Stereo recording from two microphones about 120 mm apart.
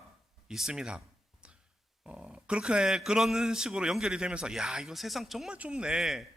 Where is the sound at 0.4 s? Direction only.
5° right (ahead or behind).